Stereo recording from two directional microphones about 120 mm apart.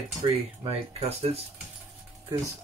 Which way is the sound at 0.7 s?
55° right (ahead or behind).